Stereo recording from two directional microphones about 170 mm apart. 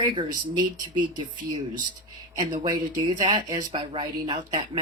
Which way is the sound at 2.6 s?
25° right (ahead or behind).